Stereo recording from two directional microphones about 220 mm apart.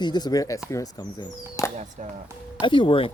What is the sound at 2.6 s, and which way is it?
Speech, 20° left (ahead or behind).